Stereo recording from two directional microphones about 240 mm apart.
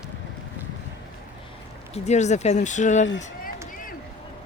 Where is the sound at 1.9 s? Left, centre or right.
Left.